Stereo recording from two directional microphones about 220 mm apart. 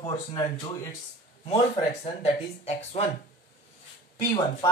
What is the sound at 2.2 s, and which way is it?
Speech, 30° left (ahead or behind).